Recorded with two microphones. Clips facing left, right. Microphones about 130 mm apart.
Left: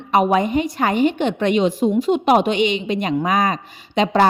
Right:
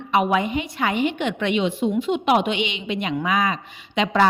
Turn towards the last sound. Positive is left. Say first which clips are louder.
# left 4 dB
turn(degrees=40)  # may be behind; listen again after turning